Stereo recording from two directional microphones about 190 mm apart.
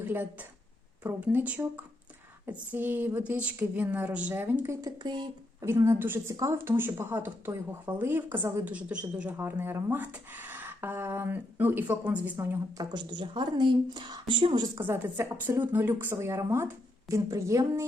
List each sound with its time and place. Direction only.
0.0 s a woman's voice: 10° right (ahead or behind)
14.8 s speech: 10° right (ahead or behind)